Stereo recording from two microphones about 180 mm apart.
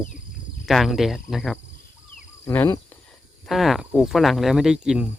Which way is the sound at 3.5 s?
Centre (ahead or behind).